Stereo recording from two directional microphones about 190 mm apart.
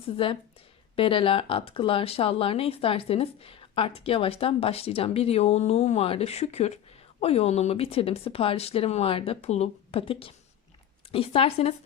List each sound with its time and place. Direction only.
0.2 s speech: 30° left (ahead or behind)